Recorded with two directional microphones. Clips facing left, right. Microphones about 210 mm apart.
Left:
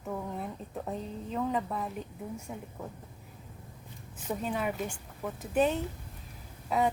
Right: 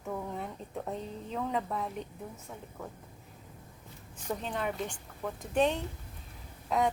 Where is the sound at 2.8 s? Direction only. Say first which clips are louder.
Right 2 dB; 15° left (ahead or behind).